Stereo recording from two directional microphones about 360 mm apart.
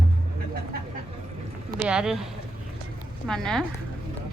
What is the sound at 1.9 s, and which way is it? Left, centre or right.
Speech, centre.